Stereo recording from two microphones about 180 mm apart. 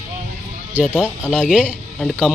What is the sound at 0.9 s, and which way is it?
Speech, 10° right (ahead or behind).